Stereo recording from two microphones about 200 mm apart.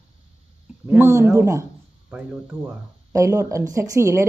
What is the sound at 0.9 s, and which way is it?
Speech, 10° right (ahead or behind).